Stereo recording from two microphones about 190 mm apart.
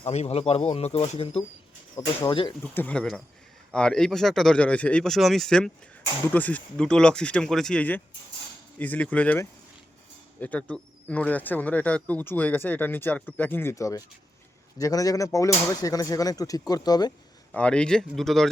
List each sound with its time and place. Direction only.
0.0 s speech: 35° left (ahead or behind)
2.0 s speech: 25° left (ahead or behind)
2.7 s speech: 5° left (ahead or behind)
17.5 s speech: 5° left (ahead or behind)